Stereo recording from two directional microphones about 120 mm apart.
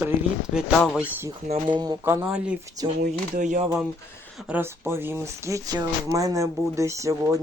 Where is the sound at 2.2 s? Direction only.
10° right (ahead or behind).